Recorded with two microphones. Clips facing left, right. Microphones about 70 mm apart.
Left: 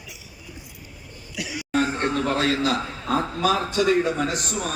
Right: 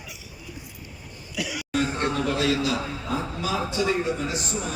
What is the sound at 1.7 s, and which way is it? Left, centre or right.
A man's voice, left.